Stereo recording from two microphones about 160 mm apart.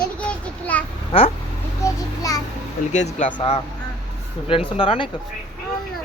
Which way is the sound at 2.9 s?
45° left (ahead or behind).